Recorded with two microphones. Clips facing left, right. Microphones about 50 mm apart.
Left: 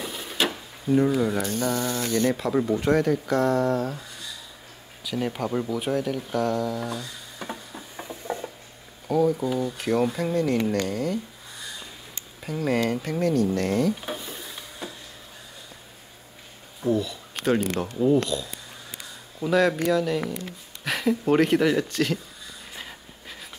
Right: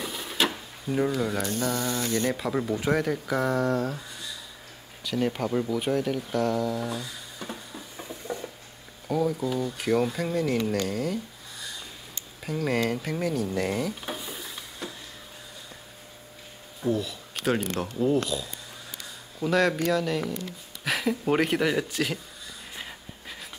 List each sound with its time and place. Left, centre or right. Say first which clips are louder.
0.0 s a sound: even; centre
1.1 s speech: left 3 dB; centre
5.0 s speech: right 1 dB; centre
8.0 s patter: left 3 dB; left
9.0 s speech: left 4 dB; centre
12.4 s speech: left 2 dB; centre
16.8 s speech: left 3 dB; centre
22.8 s a sound: even; centre